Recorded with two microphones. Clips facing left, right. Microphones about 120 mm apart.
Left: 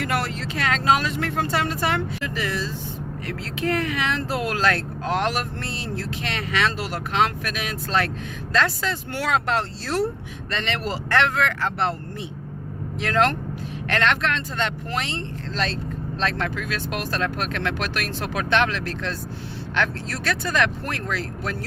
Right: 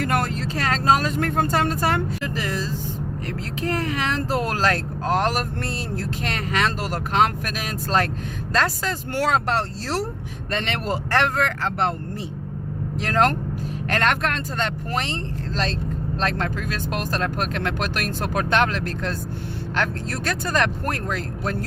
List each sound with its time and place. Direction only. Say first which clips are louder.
0.0 s speech: right 2 dB; 45° right (ahead or behind)
10.5 s speech: right 2 dB; 50° right (ahead or behind)
13.0 s speech: right 1 dB; 40° right (ahead or behind)